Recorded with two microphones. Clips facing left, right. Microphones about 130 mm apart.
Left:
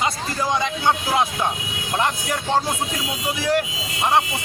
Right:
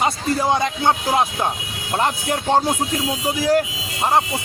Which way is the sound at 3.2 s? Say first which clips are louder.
Right 3 dB; 40° right (ahead or behind).